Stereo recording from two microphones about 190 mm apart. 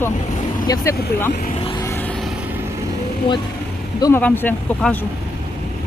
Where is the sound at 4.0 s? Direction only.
20° left (ahead or behind).